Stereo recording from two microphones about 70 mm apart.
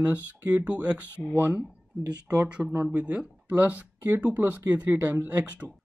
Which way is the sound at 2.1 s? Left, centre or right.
Centre.